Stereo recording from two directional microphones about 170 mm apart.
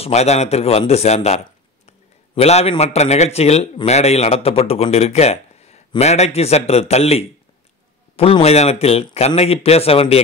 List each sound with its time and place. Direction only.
0.0 s a man's voice: 40° left (ahead or behind)